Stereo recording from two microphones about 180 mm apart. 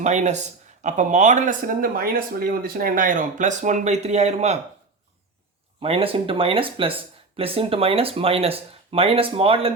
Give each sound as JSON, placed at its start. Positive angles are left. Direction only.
{"t": 0.0, "sound": "speech", "side_deg": -40}
{"t": 5.8, "sound": "speech", "side_deg": -30}